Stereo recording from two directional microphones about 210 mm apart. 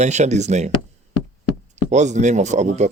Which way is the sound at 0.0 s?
35° right (ahead or behind).